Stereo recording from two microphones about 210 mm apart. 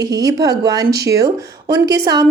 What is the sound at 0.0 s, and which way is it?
A woman's voice, 20° right (ahead or behind).